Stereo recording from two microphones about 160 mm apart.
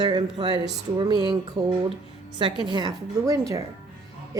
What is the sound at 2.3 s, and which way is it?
A woman's voice, 30° right (ahead or behind).